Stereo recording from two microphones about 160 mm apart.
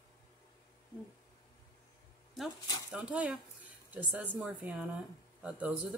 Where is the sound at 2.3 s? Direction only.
Centre (ahead or behind).